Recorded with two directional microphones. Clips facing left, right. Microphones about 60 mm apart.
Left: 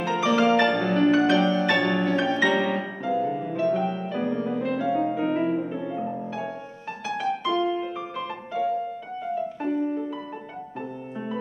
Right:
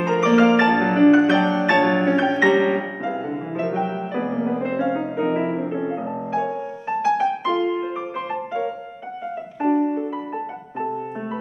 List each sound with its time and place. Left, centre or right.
0.0 s music: right